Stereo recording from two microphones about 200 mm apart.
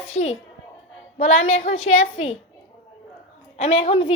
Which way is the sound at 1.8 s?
90° left.